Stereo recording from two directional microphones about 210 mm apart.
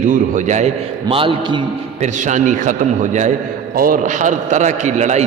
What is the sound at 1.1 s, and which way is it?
Speech, 25° right (ahead or behind).